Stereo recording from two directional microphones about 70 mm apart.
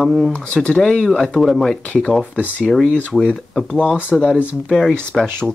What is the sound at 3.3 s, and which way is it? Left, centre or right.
Speech, centre.